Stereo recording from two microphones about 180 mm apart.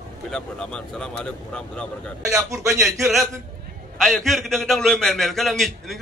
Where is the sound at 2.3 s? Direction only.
15° right (ahead or behind).